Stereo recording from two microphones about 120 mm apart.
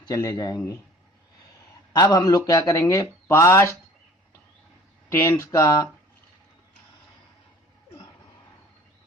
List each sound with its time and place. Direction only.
0.1 s speech: 30° left (ahead or behind)
2.0 s speech: 35° left (ahead or behind)
5.0 s speech: 20° left (ahead or behind)